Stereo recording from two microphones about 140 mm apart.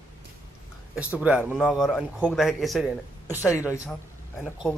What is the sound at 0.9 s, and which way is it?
Speech, 10° right (ahead or behind).